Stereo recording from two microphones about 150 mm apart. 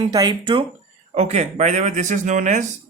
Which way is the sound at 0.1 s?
25° right (ahead or behind).